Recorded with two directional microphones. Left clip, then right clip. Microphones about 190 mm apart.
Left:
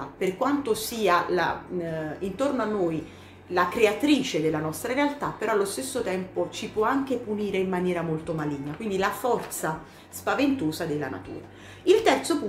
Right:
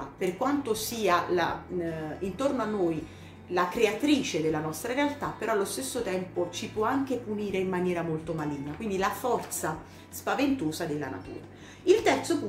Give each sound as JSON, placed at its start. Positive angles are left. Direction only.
{"t": 0.2, "sound": "a woman's voice", "side_deg": 5}